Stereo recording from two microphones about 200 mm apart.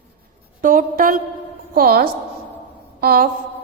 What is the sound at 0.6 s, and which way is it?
A woman's voice, 45° right (ahead or behind).